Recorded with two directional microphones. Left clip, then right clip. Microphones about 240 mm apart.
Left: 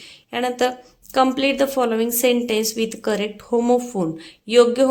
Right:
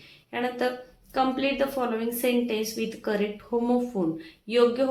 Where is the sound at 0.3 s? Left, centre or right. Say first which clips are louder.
Left 7 dB; left.